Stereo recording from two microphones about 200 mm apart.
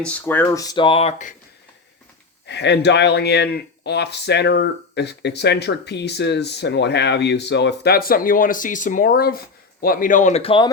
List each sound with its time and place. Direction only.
0.0 s speech: 10° left (ahead or behind); by 1.4 s 35° left (ahead or behind)
2.5 s speech: 60° left (ahead or behind); by 10.7 s 25° left (ahead or behind)